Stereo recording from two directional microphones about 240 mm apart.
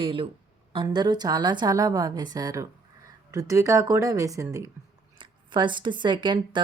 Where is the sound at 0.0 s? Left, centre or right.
Right.